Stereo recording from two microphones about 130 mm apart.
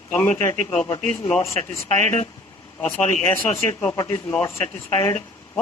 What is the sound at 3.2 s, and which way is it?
Speech, 20° left (ahead or behind).